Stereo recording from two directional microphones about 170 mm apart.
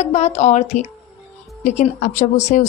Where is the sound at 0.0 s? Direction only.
40° left (ahead or behind).